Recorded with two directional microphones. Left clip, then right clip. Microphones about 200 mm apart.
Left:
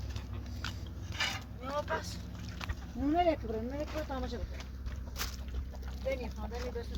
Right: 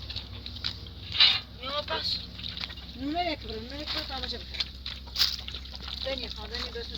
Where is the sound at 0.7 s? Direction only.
Centre (ahead or behind).